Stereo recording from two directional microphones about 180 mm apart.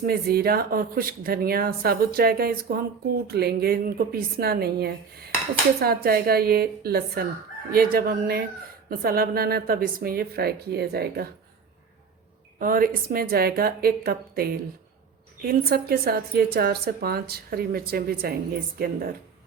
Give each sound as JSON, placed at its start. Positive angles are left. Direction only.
{"t": 0.0, "sound": "speech", "side_deg": -60}
{"t": 12.5, "sound": "speech", "side_deg": -50}